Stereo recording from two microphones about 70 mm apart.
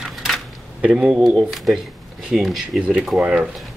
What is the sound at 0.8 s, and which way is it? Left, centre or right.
Speech, centre.